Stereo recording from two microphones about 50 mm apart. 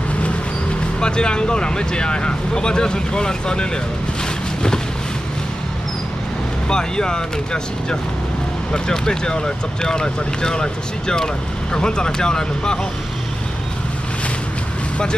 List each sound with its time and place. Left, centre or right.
1.0 s speech: centre
6.7 s speech: centre